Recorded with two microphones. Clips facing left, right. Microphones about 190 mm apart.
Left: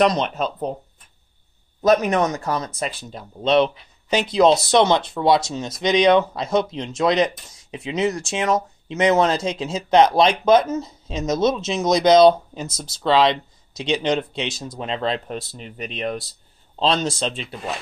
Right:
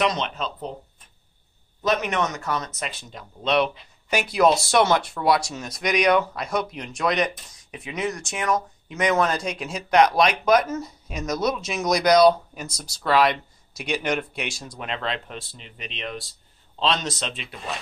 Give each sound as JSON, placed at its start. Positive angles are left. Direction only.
{"t": 0.0, "sound": "speech", "side_deg": 40}
{"t": 1.8, "sound": "speech", "side_deg": 40}
{"t": 16.7, "sound": "speech", "side_deg": 35}